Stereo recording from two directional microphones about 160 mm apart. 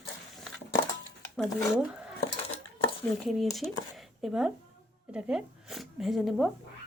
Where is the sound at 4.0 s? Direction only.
Centre (ahead or behind).